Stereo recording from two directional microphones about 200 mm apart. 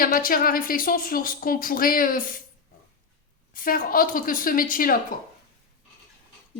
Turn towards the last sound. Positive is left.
turn(degrees=45)  # may be behind; listen again after turning